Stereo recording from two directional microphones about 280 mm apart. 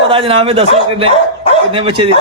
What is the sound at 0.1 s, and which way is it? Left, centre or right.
A man's voice, centre.